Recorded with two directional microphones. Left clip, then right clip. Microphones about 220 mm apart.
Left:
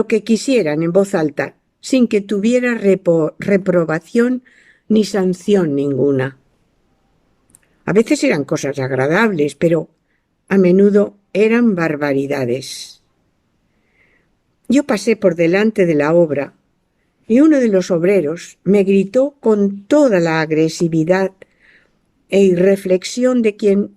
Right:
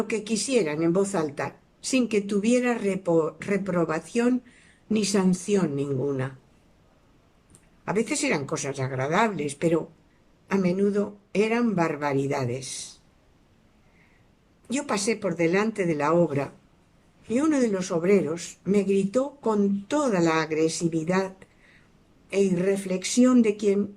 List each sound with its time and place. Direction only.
0.0 s a woman's voice: 40° left (ahead or behind)
7.9 s a woman's voice: 40° left (ahead or behind)
14.7 s a woman's voice: 40° left (ahead or behind)